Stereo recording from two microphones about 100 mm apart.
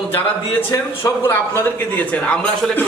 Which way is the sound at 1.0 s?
25° left (ahead or behind).